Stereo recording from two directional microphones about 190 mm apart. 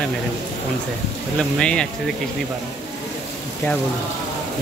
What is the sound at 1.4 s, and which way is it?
Speech, 5° left (ahead or behind).